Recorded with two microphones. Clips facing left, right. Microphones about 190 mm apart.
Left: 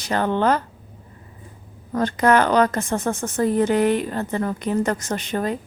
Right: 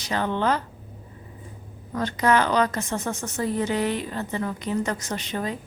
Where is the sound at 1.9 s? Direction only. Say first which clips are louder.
Left 4 dB; 50° left (ahead or behind).